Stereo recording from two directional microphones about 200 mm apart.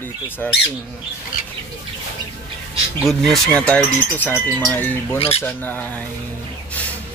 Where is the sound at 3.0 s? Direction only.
Centre (ahead or behind).